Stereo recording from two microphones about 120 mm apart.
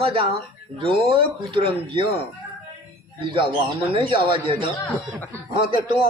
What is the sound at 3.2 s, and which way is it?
Speech, 45° right (ahead or behind).